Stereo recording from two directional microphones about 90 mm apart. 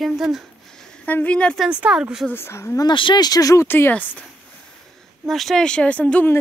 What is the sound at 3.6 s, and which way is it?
Speech, 25° left (ahead or behind).